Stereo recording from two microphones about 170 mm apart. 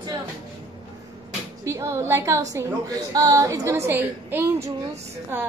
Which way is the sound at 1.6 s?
15° right (ahead or behind).